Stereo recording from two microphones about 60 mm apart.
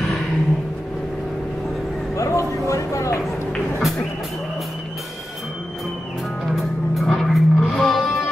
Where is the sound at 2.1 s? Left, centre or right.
Left.